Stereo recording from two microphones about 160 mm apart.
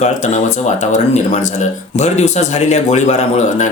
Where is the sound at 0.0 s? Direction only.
45° left (ahead or behind).